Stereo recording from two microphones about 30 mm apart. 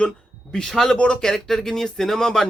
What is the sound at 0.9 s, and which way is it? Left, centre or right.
Speech, left.